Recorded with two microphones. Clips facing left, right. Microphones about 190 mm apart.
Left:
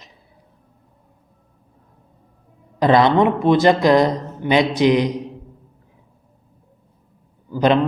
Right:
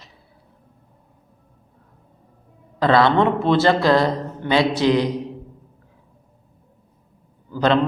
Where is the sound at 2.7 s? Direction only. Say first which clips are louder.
Left 2 dB; 15° left (ahead or behind).